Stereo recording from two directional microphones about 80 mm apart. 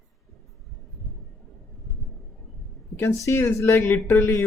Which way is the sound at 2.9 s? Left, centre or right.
Left.